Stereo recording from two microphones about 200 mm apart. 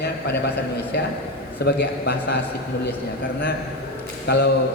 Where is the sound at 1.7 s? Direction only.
55° left (ahead or behind).